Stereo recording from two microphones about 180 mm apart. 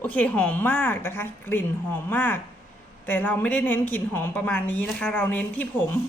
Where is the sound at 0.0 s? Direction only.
10° left (ahead or behind).